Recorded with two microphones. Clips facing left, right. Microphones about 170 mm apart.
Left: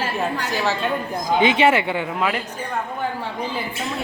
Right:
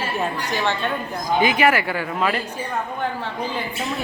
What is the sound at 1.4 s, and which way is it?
Speech, 25° left (ahead or behind).